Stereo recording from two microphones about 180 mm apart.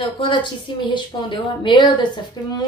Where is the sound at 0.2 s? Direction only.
25° left (ahead or behind).